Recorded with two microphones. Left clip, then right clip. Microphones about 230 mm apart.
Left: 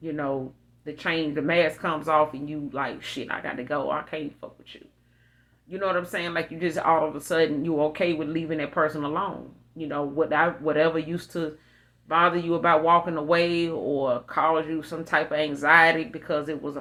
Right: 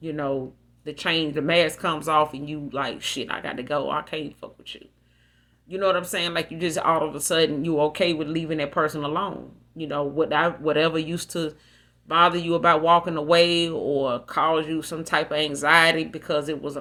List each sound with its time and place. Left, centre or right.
0.0 s speech: right
5.7 s speech: right